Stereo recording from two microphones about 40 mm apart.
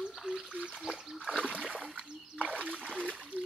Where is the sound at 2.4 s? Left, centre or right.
Right.